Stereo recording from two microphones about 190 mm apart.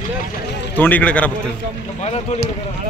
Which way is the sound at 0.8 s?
10° left (ahead or behind).